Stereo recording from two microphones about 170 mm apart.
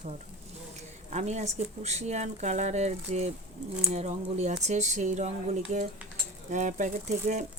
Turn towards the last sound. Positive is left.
turn(degrees=-45)  # may be behind; listen again after turning